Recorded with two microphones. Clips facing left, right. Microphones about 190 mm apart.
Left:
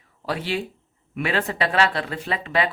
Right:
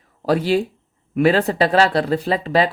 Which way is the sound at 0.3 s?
40° right (ahead or behind).